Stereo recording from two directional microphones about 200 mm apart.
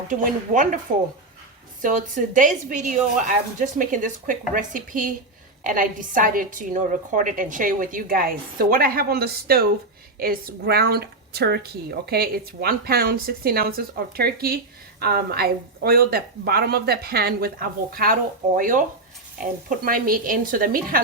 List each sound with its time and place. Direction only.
0.1 s a woman's voice: 40° right (ahead or behind)
1.8 s a woman's voice: 40° right (ahead or behind)